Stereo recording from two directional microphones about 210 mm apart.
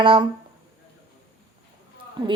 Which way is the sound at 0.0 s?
25° right (ahead or behind).